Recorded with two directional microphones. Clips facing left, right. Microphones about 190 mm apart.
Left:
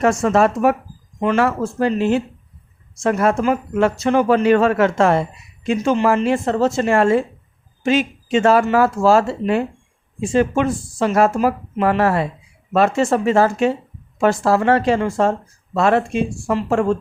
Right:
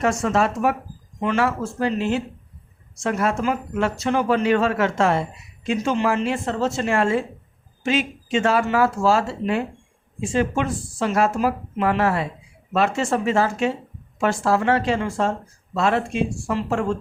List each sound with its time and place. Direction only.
0.0 s speech: 50° left (ahead or behind)